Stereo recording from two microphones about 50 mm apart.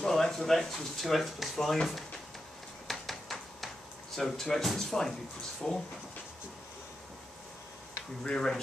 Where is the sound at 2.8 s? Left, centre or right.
Centre.